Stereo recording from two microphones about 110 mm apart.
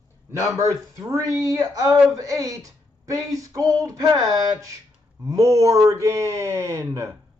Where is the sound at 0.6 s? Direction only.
25° right (ahead or behind).